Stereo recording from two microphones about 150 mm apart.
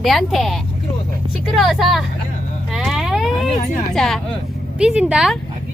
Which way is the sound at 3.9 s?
Centre (ahead or behind).